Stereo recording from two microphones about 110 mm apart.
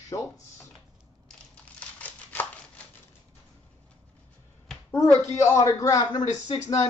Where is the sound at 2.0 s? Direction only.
15° left (ahead or behind).